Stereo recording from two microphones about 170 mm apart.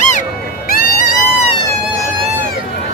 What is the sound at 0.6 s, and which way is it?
Music, 60° left (ahead or behind).